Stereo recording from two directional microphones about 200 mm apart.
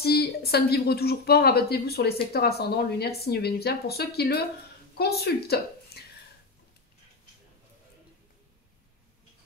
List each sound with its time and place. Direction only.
0.0 s a woman's voice: 50° left (ahead or behind)